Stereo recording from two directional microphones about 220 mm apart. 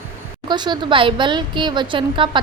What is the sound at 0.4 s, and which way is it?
A woman's voice, 20° right (ahead or behind).